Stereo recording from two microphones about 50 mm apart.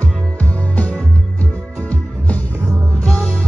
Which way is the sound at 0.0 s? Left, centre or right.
Left.